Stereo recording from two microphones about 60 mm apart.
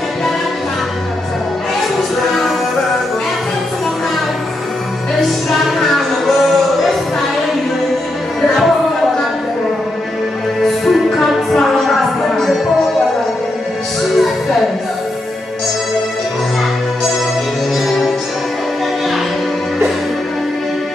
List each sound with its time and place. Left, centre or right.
5.5 s music: centre
8.4 s music: centre
10.6 s music: centre
14.1 s music: centre
17.8 s music: centre